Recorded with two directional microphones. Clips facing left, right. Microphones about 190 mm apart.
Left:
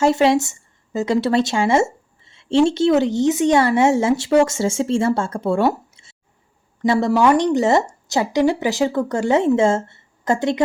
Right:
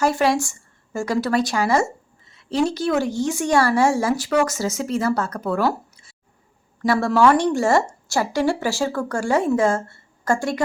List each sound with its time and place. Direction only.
0.0 s a woman's voice: 25° left (ahead or behind)